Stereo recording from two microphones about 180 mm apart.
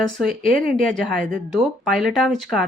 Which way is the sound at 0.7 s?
5° left (ahead or behind).